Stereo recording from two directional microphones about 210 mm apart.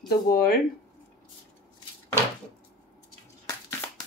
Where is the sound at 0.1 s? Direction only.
50° left (ahead or behind).